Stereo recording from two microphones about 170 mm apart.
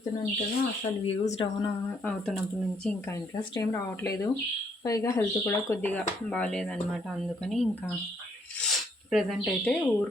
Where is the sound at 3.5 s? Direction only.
15° left (ahead or behind).